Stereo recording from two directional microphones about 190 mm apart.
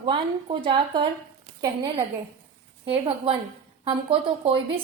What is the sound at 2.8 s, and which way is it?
A woman's voice, 30° right (ahead or behind).